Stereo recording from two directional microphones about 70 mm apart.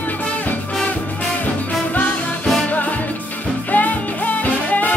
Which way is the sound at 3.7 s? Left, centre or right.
Left.